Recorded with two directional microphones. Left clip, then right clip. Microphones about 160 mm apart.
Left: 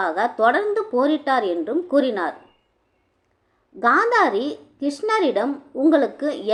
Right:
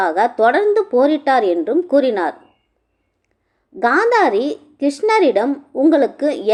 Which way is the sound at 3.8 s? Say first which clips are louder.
Right 3 dB; 25° right (ahead or behind).